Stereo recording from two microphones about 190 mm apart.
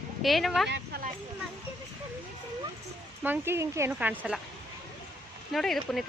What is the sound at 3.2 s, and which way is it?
Speech, 10° right (ahead or behind).